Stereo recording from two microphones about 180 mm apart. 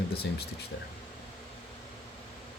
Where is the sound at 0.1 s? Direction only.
60° left (ahead or behind).